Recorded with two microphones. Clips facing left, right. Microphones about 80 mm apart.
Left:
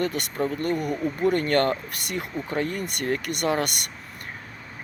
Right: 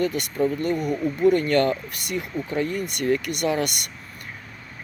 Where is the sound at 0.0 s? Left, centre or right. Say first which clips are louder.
Right 3 dB; left.